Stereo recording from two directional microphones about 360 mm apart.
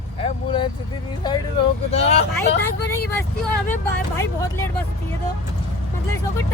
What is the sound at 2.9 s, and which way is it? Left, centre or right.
Speech, centre.